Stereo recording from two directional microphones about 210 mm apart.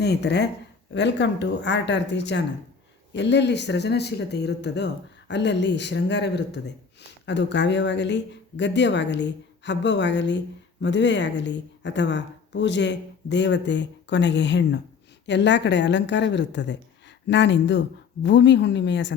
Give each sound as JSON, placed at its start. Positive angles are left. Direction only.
{"t": 0.0, "sound": "speech", "side_deg": 50}